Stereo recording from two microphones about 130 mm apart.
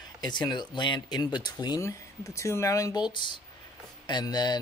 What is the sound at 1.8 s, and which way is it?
Speech, 25° left (ahead or behind).